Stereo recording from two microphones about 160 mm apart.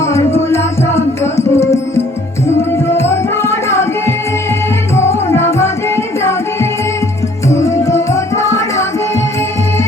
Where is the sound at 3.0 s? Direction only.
15° left (ahead or behind).